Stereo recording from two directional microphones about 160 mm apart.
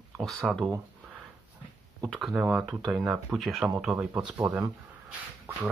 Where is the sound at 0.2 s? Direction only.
Centre (ahead or behind).